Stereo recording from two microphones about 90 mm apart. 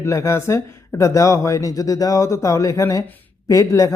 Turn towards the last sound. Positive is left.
turn(degrees=40)  # may be behind; listen again after turning